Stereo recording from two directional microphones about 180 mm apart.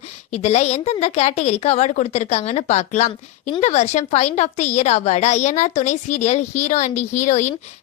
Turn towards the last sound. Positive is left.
turn(degrees=40)  # may be behind; listen again after turning